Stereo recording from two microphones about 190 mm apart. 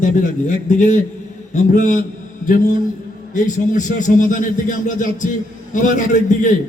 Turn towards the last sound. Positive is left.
turn(degrees=40)  # may be behind; listen again after turning